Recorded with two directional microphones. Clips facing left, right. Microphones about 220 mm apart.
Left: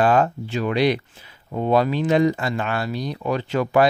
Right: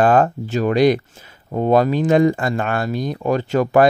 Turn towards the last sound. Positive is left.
turn(degrees=-45)  # may be behind; listen again after turning